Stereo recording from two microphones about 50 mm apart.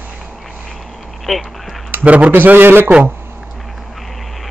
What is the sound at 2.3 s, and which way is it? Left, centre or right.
Speech, right.